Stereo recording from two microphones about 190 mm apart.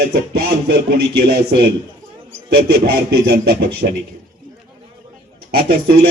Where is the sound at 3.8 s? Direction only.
40° right (ahead or behind).